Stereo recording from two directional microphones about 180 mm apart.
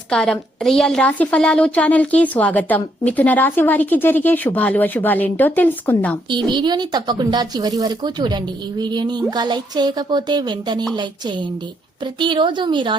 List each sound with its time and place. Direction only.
0.1 s a woman's voice: 5° left (ahead or behind)
6.3 s a woman's voice: 25° right (ahead or behind)